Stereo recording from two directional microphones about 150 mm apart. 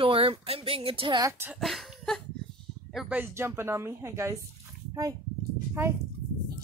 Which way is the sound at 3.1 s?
15° right (ahead or behind).